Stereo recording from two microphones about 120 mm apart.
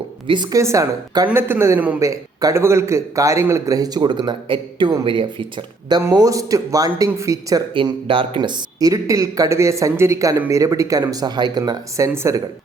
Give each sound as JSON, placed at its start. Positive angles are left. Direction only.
{"t": 0.5, "sound": "speech", "side_deg": -25}
{"t": 1.3, "sound": "a man's voice", "side_deg": -20}
{"t": 6.0, "sound": "speech", "side_deg": -25}
{"t": 7.7, "sound": "speech", "side_deg": -45}